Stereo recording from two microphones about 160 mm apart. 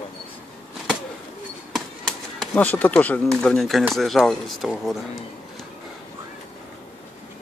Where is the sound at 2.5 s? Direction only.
10° left (ahead or behind).